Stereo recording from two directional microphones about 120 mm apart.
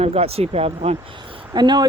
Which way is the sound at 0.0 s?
65° right (ahead or behind).